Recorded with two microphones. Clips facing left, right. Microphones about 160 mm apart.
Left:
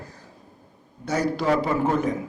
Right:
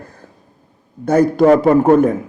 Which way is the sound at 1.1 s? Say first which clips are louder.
Right 12 dB; 50° right (ahead or behind).